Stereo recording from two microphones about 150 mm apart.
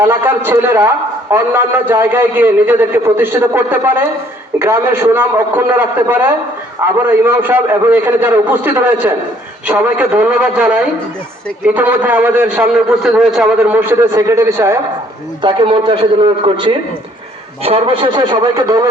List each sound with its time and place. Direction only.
0.0 s a man's voice: 15° right (ahead or behind)
15.4 s a man's voice: 30° right (ahead or behind)